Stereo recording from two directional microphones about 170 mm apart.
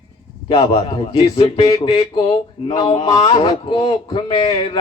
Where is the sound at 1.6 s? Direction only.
25° left (ahead or behind).